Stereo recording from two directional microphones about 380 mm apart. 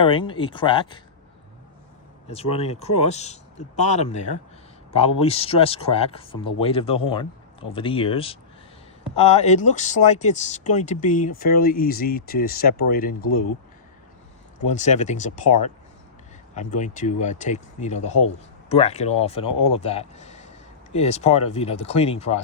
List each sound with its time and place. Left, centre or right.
0.0 s speech: centre
2.2 s speech: centre
14.7 s speech: centre